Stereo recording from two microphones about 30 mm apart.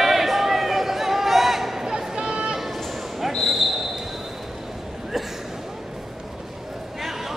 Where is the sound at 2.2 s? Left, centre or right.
Right.